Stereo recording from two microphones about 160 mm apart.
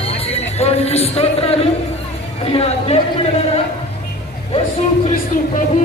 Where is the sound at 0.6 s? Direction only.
40° left (ahead or behind).